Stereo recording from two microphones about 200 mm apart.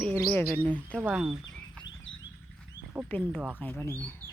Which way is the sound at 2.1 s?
75° left (ahead or behind).